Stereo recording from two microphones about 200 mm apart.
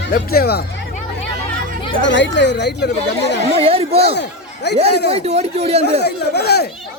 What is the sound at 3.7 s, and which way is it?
Speech, 30° right (ahead or behind).